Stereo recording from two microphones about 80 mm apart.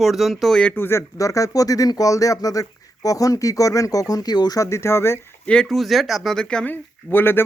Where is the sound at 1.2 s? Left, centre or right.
Left.